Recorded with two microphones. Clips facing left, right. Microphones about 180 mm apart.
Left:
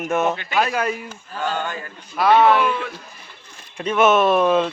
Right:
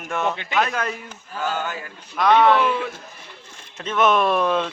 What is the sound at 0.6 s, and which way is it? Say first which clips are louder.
Speech: left 2 dB; 5° left (ahead or behind).